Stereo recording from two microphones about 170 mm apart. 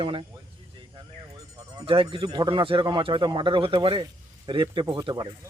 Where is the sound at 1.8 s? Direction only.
30° right (ahead or behind).